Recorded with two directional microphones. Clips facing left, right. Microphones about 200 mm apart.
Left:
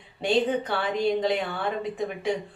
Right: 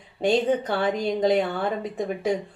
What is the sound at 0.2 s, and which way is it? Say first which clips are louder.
Speech: right 2 dB; 45° right (ahead or behind).